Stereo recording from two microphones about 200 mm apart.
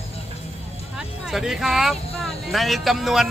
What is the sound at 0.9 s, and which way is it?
Speech, centre (ahead or behind).